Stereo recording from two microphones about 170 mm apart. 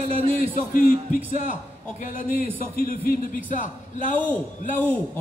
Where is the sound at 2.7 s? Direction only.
60° left (ahead or behind).